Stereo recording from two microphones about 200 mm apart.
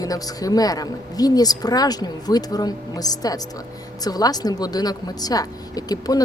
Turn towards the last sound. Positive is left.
turn(degrees=20)  # may be behind; listen again after turning